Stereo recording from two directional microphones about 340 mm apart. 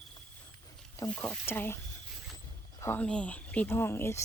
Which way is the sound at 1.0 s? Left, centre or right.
Centre.